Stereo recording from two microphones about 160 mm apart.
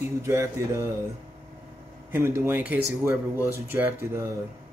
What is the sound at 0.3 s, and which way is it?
Speech, 15° right (ahead or behind).